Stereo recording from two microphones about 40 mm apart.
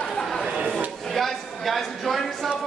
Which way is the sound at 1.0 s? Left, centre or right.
Centre.